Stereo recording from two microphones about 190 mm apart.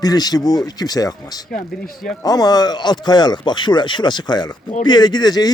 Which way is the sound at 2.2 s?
20° left (ahead or behind).